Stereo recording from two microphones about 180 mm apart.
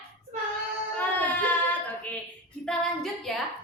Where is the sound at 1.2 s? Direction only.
10° left (ahead or behind).